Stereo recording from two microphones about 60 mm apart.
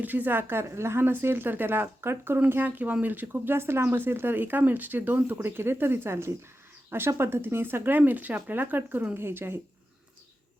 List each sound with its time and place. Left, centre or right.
0.0 s speech: right
0.6 s speech: right